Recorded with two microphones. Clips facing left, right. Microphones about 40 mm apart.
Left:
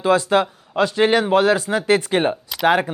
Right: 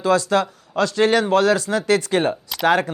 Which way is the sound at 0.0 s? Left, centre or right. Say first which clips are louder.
Left 1 dB; left.